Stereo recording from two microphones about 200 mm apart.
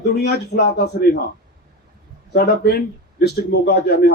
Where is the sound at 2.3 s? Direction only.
55° left (ahead or behind).